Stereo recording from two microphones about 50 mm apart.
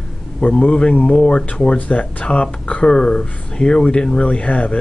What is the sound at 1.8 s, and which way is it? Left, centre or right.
A man's voice, left.